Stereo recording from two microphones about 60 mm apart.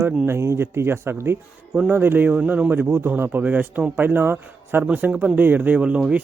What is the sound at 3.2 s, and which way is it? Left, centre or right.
Speech, right.